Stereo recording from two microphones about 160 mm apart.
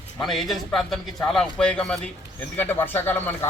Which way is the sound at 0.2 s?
Centre (ahead or behind).